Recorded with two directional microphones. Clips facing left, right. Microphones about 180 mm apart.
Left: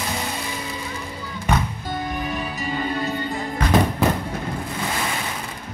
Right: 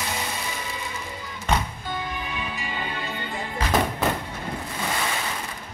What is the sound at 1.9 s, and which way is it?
Music, 45° left (ahead or behind).